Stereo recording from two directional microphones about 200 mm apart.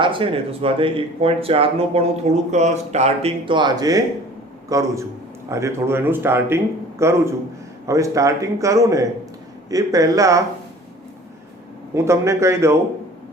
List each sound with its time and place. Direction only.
0.0 s a man's voice: 25° right (ahead or behind)
11.9 s a man's voice: 15° right (ahead or behind)